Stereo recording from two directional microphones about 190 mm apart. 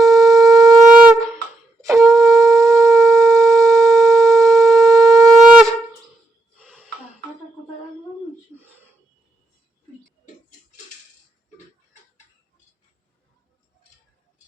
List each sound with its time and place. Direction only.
0.0 s shofar: centre (ahead or behind)
0.6 s shofar: 20° right (ahead or behind)
2.0 s shofar: centre (ahead or behind)
2.4 s shofar: 15° right (ahead or behind)
2.6 s shofar: centre (ahead or behind)
6.7 s music: 10° right (ahead or behind)